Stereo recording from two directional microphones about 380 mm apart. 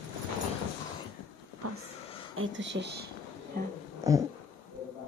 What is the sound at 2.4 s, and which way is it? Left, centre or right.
Speech, right.